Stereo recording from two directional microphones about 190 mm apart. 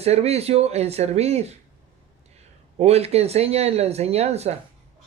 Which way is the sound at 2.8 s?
35° right (ahead or behind).